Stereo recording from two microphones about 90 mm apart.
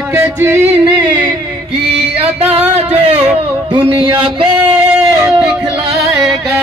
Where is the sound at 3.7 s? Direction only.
80° right.